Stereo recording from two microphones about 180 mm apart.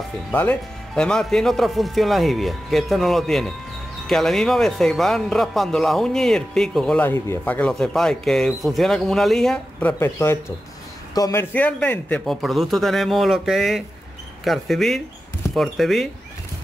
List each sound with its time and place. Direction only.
0.3 s speech: 10° left (ahead or behind)
11.5 s speech: 10° left (ahead or behind)